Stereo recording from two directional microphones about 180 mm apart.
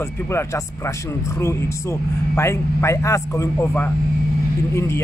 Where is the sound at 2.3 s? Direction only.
15° left (ahead or behind).